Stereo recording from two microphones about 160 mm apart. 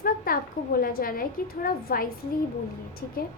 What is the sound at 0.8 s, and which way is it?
A woman's voice, 65° left (ahead or behind).